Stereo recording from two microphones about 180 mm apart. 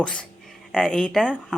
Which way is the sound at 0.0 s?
5° left (ahead or behind).